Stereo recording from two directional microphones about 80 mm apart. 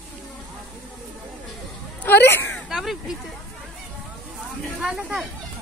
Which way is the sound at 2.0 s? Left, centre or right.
Left.